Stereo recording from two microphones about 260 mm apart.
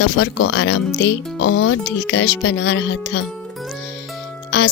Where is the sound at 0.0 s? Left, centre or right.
Left.